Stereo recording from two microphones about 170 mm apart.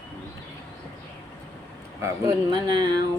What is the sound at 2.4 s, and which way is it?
Speech, 25° right (ahead or behind).